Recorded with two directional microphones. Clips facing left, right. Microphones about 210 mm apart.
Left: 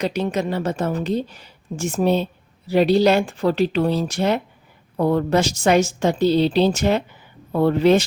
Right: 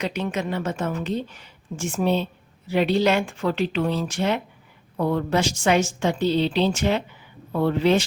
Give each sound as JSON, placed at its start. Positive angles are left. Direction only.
{"t": 0.0, "sound": "a woman's voice", "side_deg": 35}